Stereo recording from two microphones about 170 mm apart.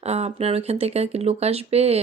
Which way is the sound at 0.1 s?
40° right (ahead or behind).